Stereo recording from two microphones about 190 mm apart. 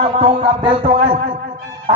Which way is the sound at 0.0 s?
30° right (ahead or behind).